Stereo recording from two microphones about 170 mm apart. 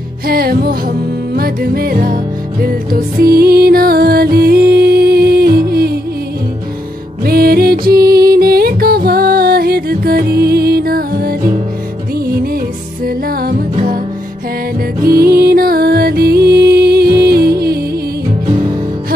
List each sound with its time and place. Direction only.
0.3 s music: 65° right (ahead or behind)
7.2 s music: 65° right (ahead or behind)
13.0 s music: 60° right (ahead or behind)
15.0 s music: 65° right (ahead or behind)